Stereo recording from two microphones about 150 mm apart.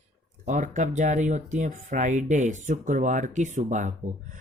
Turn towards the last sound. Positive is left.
turn(degrees=-55)  # may be behind; listen again after turning